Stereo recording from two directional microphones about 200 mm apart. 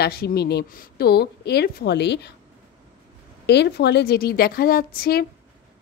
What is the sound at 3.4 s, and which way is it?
A woman's voice, 55° left (ahead or behind).